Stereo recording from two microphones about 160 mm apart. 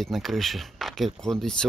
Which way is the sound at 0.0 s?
Centre (ahead or behind).